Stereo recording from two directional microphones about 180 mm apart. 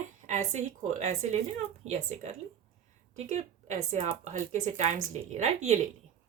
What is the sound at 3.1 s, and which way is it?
A woman's voice, 40° right (ahead or behind).